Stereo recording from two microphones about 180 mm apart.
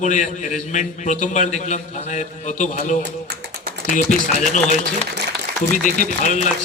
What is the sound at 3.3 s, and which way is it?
Tap, 60° right (ahead or behind).